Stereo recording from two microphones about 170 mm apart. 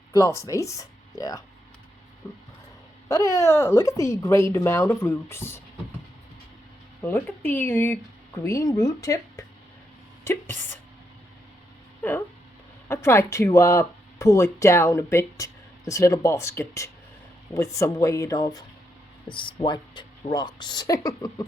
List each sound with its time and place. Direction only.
0.1 s speech: 20° left (ahead or behind)
7.0 s speech: 10° left (ahead or behind)
12.9 s speech: 15° left (ahead or behind)